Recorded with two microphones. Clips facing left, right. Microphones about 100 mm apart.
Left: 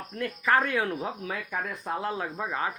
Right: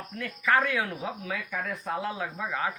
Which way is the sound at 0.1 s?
35° left (ahead or behind).